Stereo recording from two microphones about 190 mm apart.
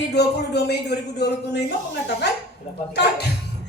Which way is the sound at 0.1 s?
60° left (ahead or behind).